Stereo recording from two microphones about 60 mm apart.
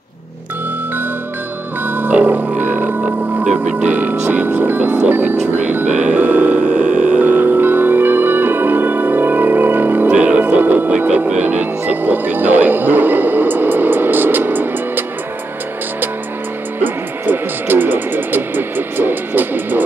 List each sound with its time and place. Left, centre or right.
1.9 s music: right
10.1 s music: right
10.4 s music: right
16.8 s music: right